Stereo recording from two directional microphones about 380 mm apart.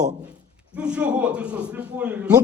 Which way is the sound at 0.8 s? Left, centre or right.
Centre.